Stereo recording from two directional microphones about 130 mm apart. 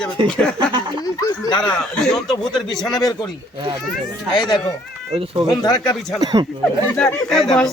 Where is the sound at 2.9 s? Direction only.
30° left (ahead or behind).